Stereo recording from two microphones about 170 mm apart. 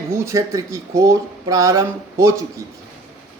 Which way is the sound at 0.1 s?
15° right (ahead or behind).